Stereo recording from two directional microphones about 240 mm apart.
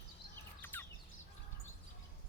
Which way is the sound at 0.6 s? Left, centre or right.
Centre.